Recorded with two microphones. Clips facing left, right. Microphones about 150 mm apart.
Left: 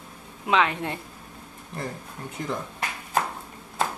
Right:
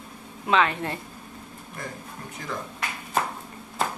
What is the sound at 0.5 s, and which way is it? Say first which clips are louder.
Speech: even; 15° left (ahead or behind).